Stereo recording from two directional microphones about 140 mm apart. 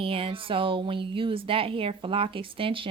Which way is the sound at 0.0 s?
40° right (ahead or behind).